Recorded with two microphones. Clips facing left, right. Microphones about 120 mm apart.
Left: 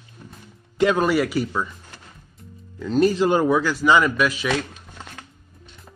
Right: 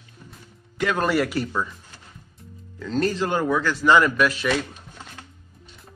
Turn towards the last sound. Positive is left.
turn(degrees=0)  # may be behind; listen again after turning